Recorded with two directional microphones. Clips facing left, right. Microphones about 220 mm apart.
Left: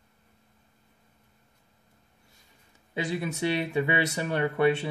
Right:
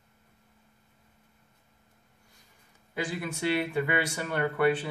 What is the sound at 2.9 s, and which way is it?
Speech, 20° left (ahead or behind).